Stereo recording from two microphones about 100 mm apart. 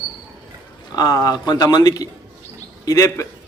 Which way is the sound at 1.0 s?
40° left (ahead or behind).